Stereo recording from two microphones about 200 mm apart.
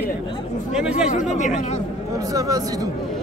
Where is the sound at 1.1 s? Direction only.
35° left (ahead or behind).